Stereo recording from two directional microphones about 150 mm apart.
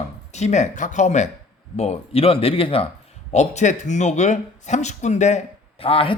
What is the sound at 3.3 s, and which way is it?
Speech, 50° left (ahead or behind).